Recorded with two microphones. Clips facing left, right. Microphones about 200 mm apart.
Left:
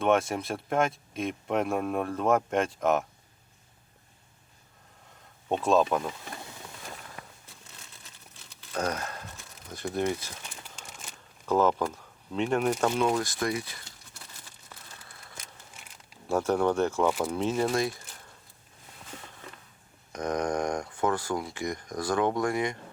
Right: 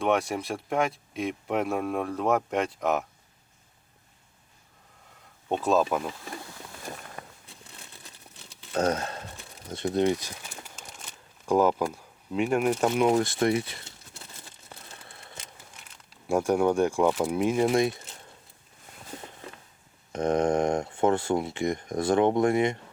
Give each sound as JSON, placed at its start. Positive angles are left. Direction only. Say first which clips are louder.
{"t": 0.0, "sound": "speech", "louder": "left 1 dB", "side_deg": 0}
{"t": 5.5, "sound": "speech", "louder": "even", "side_deg": 0}
{"t": 8.7, "sound": "a sound", "louder": "right 5 dB", "side_deg": -25}
{"t": 9.8, "sound": "speech", "louder": "right 5 dB", "side_deg": -20}
{"t": 10.4, "sound": "crumpling", "louder": "right 2 dB", "side_deg": -5}
{"t": 11.9, "sound": "speech", "louder": "right 3 dB", "side_deg": -10}
{"t": 13.1, "sound": "speech", "louder": "right 5 dB", "side_deg": -25}
{"t": 14.7, "sound": "a sound", "louder": "right 3 dB", "side_deg": -25}
{"t": 16.3, "sound": "speech", "louder": "right 2 dB", "side_deg": -10}
{"t": 20.1, "sound": "speech", "louder": "right 5 dB", "side_deg": -25}